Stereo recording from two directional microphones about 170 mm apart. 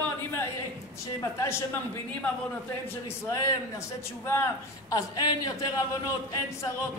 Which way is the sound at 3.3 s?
20° left (ahead or behind).